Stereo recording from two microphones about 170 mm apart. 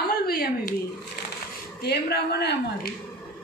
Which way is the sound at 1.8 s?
75° left (ahead or behind).